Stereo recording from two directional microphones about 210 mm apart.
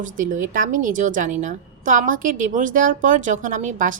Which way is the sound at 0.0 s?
40° right (ahead or behind).